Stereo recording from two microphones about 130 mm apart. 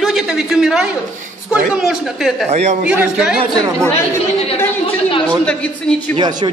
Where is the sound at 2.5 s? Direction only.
60° right (ahead or behind).